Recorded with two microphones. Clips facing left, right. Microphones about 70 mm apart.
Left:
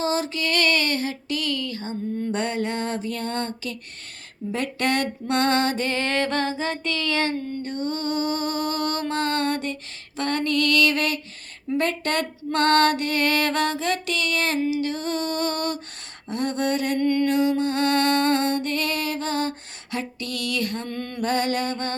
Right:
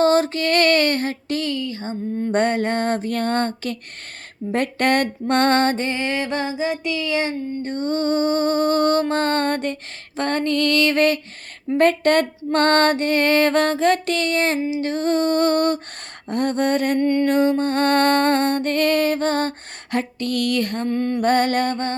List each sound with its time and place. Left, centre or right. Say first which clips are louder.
0.0 s music: right 8 dB; right
1.5 s a sound: right 3 dB; right
2.3 s music: right 9 dB; right
5.8 s music: right 1 dB; centre
7.6 s music: right 5 dB; right
17.0 s a sound: right 3 dB; right
17.2 s music: right 3 dB; right
20.9 s music: right 8 dB; right
21.2 s music: right 4 dB; right